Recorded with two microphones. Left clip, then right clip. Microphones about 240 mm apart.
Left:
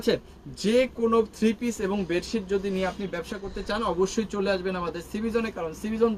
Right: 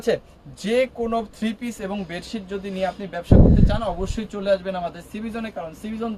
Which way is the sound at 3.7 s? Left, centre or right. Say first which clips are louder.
Even; right.